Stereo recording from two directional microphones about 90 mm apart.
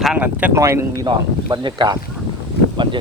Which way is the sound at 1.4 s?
60° right (ahead or behind).